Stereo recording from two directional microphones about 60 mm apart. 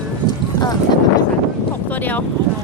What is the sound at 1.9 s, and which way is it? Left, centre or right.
Speech, left.